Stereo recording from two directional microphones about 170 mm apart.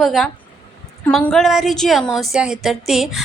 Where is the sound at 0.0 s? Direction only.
Centre (ahead or behind).